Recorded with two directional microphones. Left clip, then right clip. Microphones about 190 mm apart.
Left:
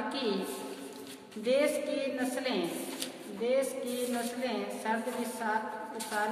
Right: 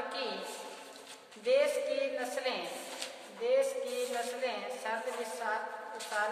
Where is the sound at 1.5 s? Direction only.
15° left (ahead or behind).